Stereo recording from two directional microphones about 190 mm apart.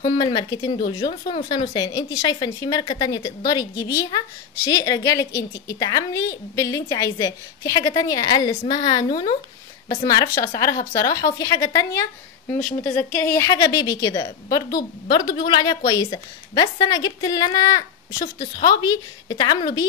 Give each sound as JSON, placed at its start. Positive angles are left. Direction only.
{"t": 0.0, "sound": "a woman's voice", "side_deg": 20}